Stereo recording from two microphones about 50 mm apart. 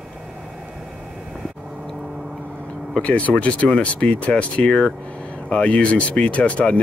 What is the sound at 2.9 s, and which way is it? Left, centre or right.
Speech, left.